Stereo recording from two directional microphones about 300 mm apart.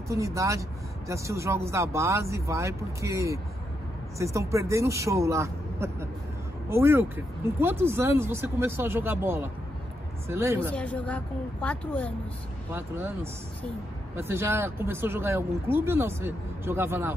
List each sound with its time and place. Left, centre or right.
0.1 s speech: centre
10.7 s a woman's voice: centre
12.7 s speech: centre